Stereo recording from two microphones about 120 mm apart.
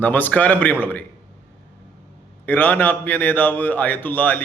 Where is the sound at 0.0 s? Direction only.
15° left (ahead or behind).